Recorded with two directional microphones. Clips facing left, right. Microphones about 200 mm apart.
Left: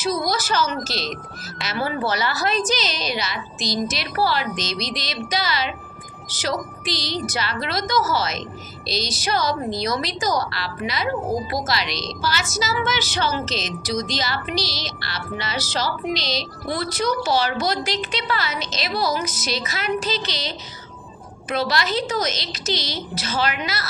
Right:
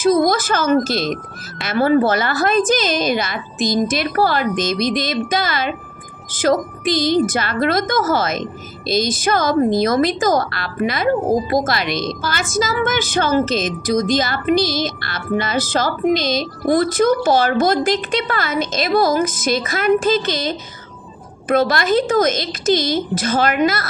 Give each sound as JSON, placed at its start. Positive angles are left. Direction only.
{"t": 0.0, "sound": "a woman's voice", "side_deg": -50}